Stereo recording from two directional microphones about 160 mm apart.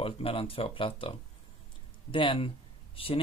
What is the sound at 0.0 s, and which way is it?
Speech, 35° left (ahead or behind).